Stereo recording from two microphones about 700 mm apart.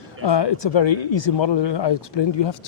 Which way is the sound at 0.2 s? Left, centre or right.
Left.